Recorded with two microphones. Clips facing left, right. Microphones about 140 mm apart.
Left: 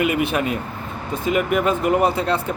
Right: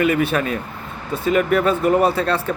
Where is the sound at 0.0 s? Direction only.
15° left (ahead or behind).